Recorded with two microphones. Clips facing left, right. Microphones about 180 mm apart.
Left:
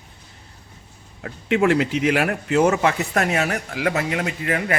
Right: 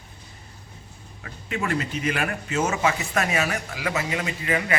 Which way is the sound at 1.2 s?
70° left (ahead or behind).